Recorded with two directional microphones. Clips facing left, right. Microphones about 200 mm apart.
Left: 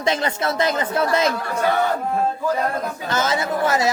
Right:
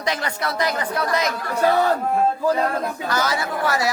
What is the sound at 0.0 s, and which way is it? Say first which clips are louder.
Speech: left 4 dB; 25° left (ahead or behind).